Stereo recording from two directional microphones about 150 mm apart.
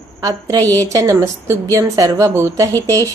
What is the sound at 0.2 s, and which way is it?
A woman's voice, 25° right (ahead or behind).